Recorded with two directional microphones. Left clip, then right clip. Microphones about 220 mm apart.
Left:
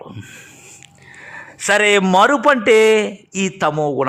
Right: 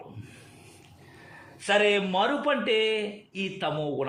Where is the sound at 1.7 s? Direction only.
35° left (ahead or behind).